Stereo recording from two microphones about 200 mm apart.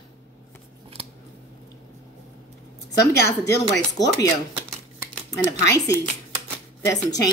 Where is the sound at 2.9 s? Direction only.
15° left (ahead or behind).